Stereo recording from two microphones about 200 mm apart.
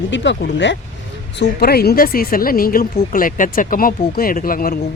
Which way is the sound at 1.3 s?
50° left (ahead or behind).